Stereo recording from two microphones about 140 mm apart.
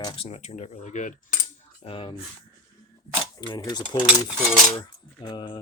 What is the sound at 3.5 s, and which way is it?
Cap gun, 30° left (ahead or behind).